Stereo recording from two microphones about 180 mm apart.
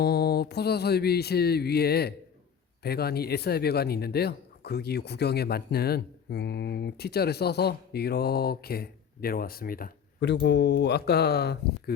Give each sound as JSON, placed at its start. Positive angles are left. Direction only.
{"t": 0.0, "sound": "speech", "side_deg": 60}